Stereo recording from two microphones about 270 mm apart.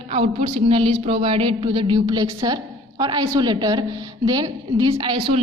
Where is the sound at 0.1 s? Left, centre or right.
Right.